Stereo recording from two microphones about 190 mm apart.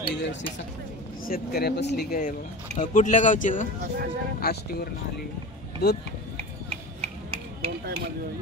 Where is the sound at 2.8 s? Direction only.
40° left (ahead or behind).